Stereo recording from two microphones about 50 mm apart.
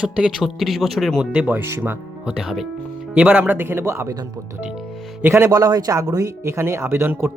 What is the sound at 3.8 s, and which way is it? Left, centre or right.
Speech, right.